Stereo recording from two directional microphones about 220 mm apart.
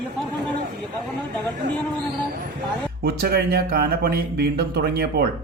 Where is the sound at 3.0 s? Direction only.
45° right (ahead or behind).